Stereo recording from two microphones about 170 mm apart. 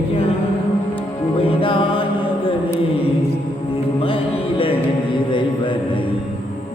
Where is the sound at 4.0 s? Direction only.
30° left (ahead or behind).